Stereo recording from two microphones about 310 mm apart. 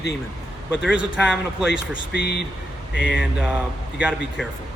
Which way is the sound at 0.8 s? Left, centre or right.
Centre.